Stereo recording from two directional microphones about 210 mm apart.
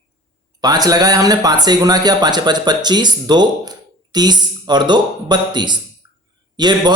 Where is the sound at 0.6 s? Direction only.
20° right (ahead or behind).